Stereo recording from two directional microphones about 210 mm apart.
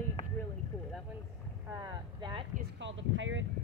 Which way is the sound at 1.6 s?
15° right (ahead or behind).